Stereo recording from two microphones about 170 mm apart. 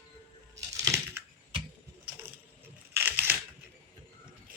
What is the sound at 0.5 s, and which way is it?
Crushing, 20° right (ahead or behind).